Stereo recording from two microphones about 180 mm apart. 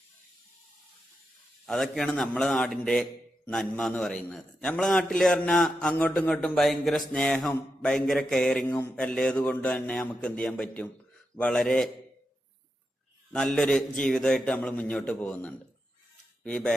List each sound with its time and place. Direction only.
1.6 s a man's voice: centre (ahead or behind)
13.3 s a man's voice: 5° left (ahead or behind)